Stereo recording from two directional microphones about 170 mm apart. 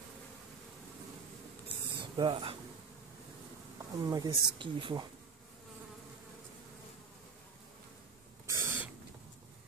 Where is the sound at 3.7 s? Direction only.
20° right (ahead or behind).